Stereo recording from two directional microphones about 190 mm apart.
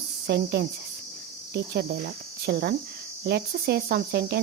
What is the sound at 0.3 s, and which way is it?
Cricket, 60° right (ahead or behind).